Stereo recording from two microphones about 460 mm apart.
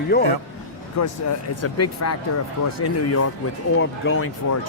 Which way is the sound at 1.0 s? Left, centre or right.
Left.